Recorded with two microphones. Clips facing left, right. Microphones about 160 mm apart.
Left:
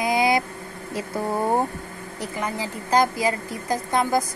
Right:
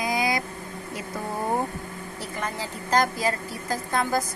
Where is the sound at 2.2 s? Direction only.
15° left (ahead or behind).